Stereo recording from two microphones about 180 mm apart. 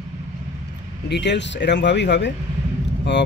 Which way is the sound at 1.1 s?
75° left (ahead or behind).